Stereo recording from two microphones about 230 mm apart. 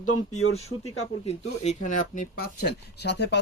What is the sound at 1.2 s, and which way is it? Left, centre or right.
Speech, left.